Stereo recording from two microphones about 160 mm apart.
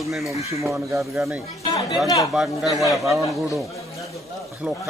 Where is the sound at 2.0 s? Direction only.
20° left (ahead or behind).